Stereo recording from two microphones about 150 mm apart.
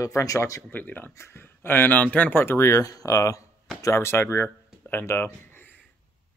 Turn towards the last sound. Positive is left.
turn(degrees=15)  # may be behind; listen again after turning